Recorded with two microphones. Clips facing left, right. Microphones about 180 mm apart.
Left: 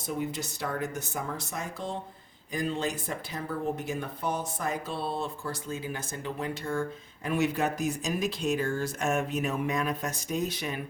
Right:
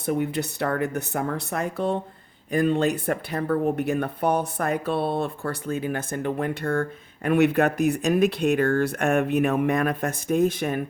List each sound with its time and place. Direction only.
0.0 s speech: 65° right (ahead or behind)